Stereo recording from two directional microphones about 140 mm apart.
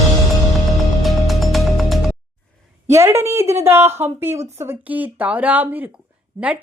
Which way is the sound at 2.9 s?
20° right (ahead or behind).